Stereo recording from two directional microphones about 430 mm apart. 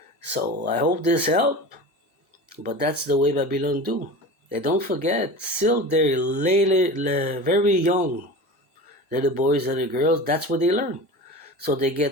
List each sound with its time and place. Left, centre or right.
0.3 s speech: right
2.6 s speech: right